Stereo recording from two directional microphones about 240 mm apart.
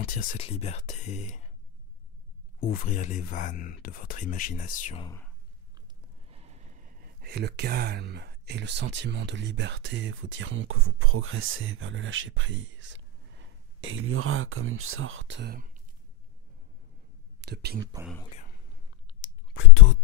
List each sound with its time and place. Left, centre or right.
0.0 s speech: left
2.6 s speech: left
5.0 s speech: centre
5.8 s speech: right
17.4 s speech: right
18.0 s speech: centre
19.0 s whispering: left